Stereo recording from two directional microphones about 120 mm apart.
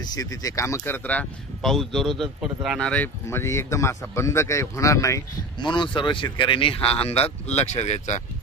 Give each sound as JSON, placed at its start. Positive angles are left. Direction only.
{"t": 0.0, "sound": "speech", "side_deg": 30}
{"t": 1.6, "sound": "a man's voice", "side_deg": 0}
{"t": 2.8, "sound": "speech", "side_deg": 10}
{"t": 3.3, "sound": "speech", "side_deg": 20}
{"t": 5.6, "sound": "speech", "side_deg": 40}